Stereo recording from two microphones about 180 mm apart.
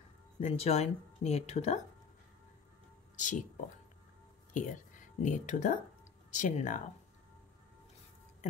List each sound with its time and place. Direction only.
0.4 s a woman's voice: 35° left (ahead or behind)
3.2 s speech: 45° left (ahead or behind)